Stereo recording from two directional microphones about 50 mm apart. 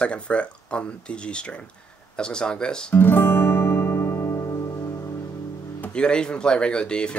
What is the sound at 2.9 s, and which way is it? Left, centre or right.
Guitar, left.